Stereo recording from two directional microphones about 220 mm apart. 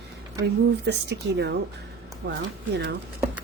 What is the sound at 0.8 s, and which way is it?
Speech, 50° right (ahead or behind).